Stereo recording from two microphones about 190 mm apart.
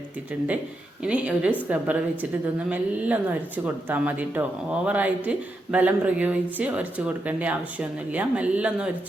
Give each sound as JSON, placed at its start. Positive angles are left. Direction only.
{"t": 1.0, "sound": "speech", "side_deg": -5}